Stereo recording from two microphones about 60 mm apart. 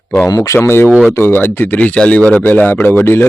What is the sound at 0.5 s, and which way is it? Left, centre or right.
Speech, left.